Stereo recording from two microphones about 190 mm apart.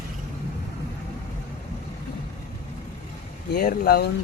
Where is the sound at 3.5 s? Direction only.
55° left (ahead or behind).